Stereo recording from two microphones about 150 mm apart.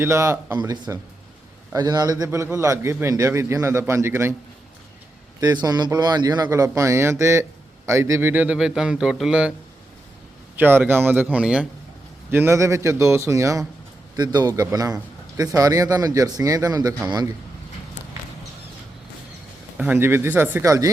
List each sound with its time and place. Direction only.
0.0 s a man's voice: 20° right (ahead or behind)
5.4 s a man's voice: 25° right (ahead or behind); by 9.5 s 5° right (ahead or behind)
10.6 s a man's voice: 15° right (ahead or behind)
19.7 s a man's voice: 10° right (ahead or behind)